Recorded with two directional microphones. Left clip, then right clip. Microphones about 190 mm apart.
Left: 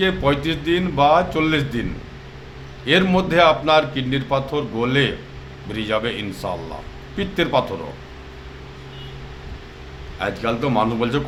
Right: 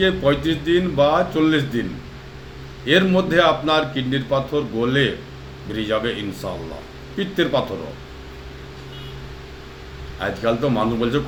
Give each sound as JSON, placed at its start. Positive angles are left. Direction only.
{"t": 0.0, "sound": "a man's voice", "side_deg": 20}
{"t": 2.8, "sound": "a man's voice", "side_deg": 20}
{"t": 10.2, "sound": "a man's voice", "side_deg": 20}